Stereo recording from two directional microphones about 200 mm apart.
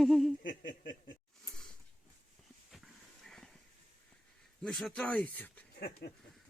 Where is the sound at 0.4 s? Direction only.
45° left (ahead or behind).